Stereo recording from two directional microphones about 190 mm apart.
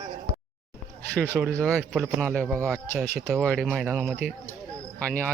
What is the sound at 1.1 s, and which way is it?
Speech, 5° left (ahead or behind).